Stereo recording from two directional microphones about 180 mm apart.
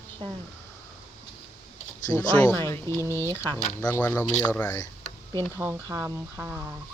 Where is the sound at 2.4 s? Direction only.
10° left (ahead or behind).